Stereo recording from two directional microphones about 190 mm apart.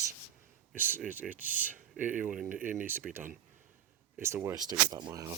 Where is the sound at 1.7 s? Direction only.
45° right (ahead or behind).